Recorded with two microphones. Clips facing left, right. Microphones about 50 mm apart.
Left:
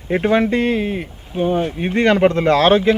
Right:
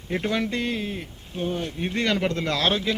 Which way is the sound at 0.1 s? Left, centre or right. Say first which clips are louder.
Left 10 dB; left.